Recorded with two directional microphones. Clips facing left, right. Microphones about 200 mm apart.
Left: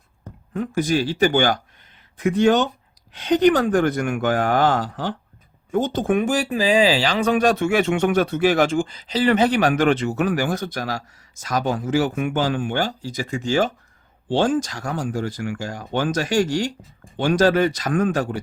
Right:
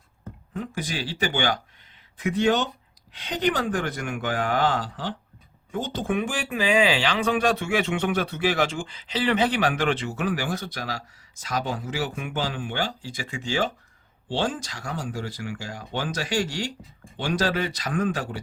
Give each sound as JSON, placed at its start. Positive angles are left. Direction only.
{"t": 0.5, "sound": "speech", "side_deg": 50}